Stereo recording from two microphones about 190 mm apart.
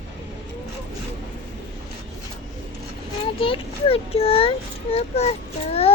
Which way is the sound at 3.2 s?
30° left (ahead or behind).